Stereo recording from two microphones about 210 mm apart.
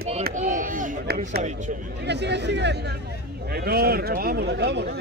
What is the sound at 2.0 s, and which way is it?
Speech, 55° right (ahead or behind).